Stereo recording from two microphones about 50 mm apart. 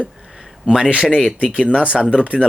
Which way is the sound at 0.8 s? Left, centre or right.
Centre.